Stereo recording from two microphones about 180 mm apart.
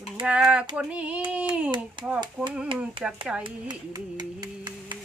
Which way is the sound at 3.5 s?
25° right (ahead or behind).